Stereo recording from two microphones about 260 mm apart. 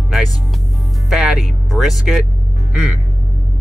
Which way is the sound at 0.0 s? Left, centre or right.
Centre.